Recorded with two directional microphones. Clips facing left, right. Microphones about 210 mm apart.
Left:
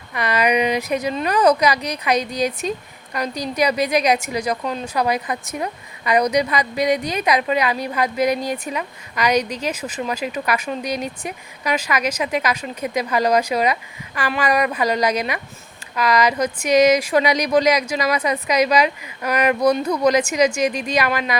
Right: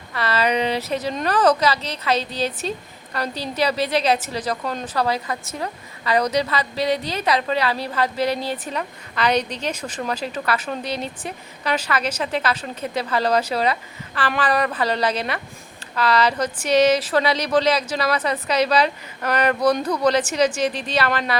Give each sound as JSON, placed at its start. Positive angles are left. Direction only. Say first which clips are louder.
{"t": 0.1, "sound": "a woman's voice", "louder": "left 2 dB", "side_deg": 15}